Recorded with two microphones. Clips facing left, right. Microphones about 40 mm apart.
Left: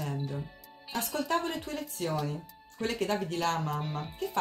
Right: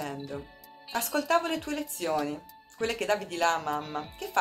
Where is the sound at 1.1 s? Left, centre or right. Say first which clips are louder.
Right 5 dB; right.